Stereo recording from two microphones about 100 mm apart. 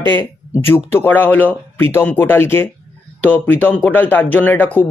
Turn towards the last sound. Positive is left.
turn(degrees=20)  # may be behind; listen again after turning